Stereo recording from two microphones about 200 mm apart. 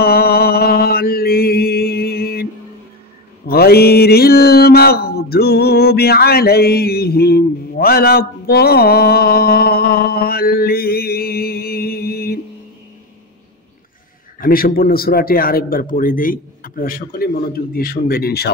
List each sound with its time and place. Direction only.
0.0 s mantra: 50° left (ahead or behind)
3.4 s mantra: 50° left (ahead or behind)
14.4 s a man's voice: 45° left (ahead or behind)